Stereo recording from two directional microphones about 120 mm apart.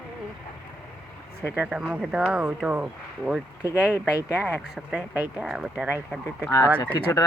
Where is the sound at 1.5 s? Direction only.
10° right (ahead or behind).